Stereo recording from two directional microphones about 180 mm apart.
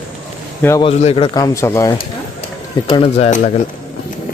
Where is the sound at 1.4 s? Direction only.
15° left (ahead or behind).